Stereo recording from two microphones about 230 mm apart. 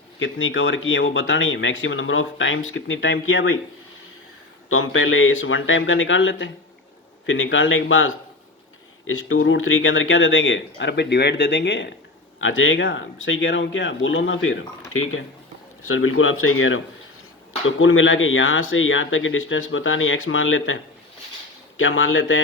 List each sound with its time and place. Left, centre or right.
0.2 s speech: left
4.7 s speech: left
21.8 s speech: left